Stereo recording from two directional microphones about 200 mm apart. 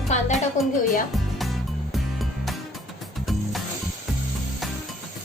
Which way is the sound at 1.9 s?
Centre (ahead or behind).